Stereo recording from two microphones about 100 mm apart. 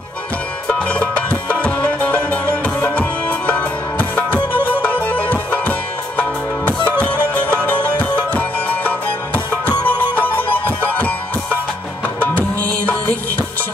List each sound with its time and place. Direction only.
0.7 s music: 15° left (ahead or behind)
7.5 s music: 15° left (ahead or behind)
12.2 s music: 15° left (ahead or behind)